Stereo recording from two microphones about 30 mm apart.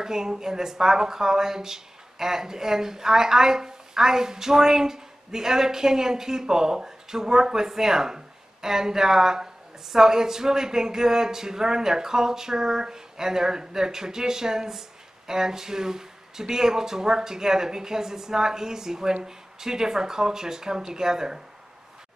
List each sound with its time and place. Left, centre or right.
0.0 s a woman's voice: centre